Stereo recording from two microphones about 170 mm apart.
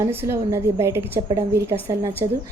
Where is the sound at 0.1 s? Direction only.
15° right (ahead or behind).